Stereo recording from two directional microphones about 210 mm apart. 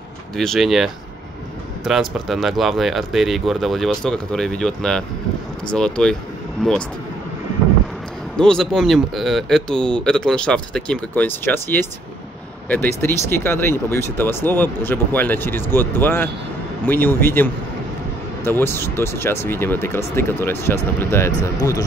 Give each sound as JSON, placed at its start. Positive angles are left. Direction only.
{"t": 0.4, "sound": "speech", "side_deg": 0}
{"t": 8.4, "sound": "speech", "side_deg": 5}